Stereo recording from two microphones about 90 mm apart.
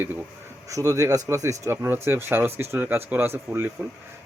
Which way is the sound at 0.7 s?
40° right (ahead or behind).